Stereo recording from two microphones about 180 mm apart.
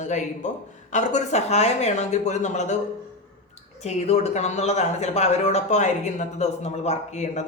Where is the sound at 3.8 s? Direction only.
35° left (ahead or behind).